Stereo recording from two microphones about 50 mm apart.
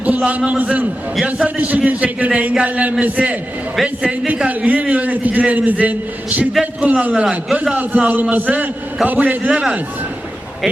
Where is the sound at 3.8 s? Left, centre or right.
Centre.